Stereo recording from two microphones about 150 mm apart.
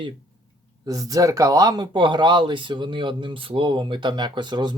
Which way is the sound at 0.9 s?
25° right (ahead or behind).